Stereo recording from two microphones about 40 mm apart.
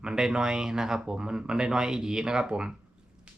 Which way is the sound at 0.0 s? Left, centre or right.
Right.